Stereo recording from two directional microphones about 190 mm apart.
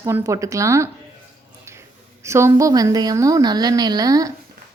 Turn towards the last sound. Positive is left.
turn(degrees=-20)  # may be behind; listen again after turning